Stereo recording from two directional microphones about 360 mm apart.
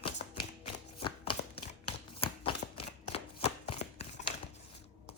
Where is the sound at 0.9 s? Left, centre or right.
Centre.